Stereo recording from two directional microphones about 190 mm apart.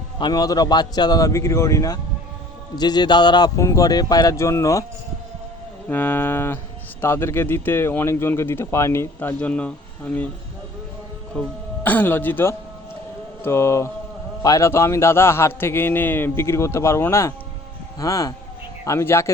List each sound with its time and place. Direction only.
0.2 s speech: 20° left (ahead or behind)
5.9 s a man's voice: 10° left (ahead or behind)
11.3 s a man's voice: 10° left (ahead or behind)